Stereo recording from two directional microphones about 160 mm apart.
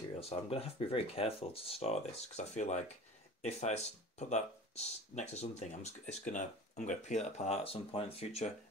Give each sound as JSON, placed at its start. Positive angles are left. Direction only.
{"t": 0.1, "sound": "speech", "side_deg": 40}